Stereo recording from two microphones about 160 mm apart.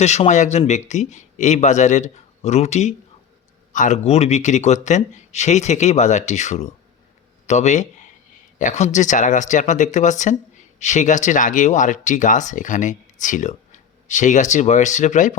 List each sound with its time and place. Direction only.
0.0 s speech: 45° left (ahead or behind)